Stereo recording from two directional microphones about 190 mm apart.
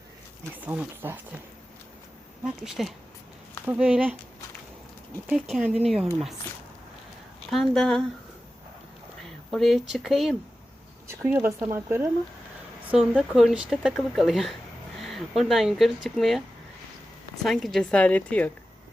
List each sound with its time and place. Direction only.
0.6 s speech: 10° right (ahead or behind)
2.4 s speech: centre (ahead or behind)
5.3 s speech: 5° right (ahead or behind)
7.5 s speech: centre (ahead or behind)
9.5 s speech: centre (ahead or behind)
11.1 s speech: 10° right (ahead or behind)
17.4 s speech: centre (ahead or behind)